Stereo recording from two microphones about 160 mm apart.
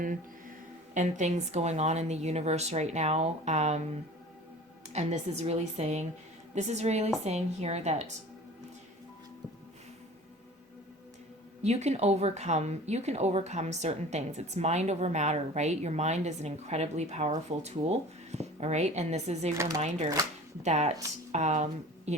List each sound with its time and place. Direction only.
0.9 s a woman's voice: 50° right (ahead or behind)
4.9 s a woman's voice: 45° right (ahead or behind)
11.6 s a woman's voice: 45° right (ahead or behind)
19.5 s speech: 20° right (ahead or behind)
20.6 s a woman's voice: 45° right (ahead or behind)